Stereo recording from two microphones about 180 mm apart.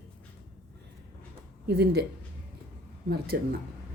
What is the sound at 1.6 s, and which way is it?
Speech, 65° right (ahead or behind).